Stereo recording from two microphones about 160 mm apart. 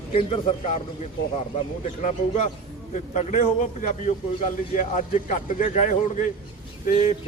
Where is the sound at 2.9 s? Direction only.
45° left (ahead or behind).